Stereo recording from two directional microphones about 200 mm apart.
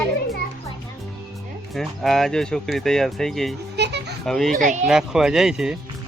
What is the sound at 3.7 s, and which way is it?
Children playing, 55° right (ahead or behind).